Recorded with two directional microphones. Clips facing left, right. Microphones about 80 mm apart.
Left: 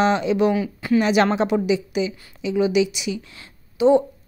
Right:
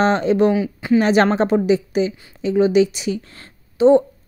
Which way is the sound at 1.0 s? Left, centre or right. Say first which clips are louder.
Right 3 dB; right.